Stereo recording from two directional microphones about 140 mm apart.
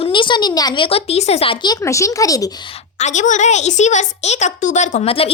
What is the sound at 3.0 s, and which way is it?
A woman's voice, 55° left (ahead or behind).